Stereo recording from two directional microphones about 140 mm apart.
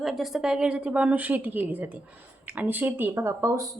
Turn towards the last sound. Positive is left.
turn(degrees=-25)  # may be behind; listen again after turning